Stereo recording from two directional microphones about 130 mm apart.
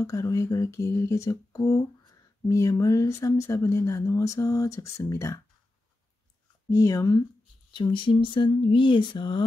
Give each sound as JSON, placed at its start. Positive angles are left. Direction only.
{"t": 0.0, "sound": "speech", "side_deg": 25}
{"t": 6.7, "sound": "speech", "side_deg": 25}
{"t": 7.7, "sound": "speech", "side_deg": 40}